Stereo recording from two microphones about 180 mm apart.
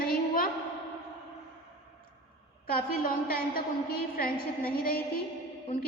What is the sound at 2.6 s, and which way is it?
A woman's voice, 55° left (ahead or behind).